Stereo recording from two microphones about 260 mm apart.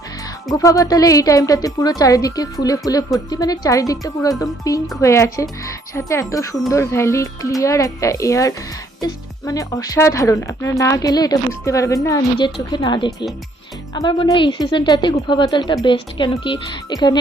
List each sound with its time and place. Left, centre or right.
0.5 s speech: centre